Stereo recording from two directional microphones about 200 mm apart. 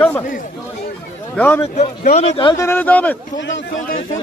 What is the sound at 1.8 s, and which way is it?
Speech, 35° left (ahead or behind).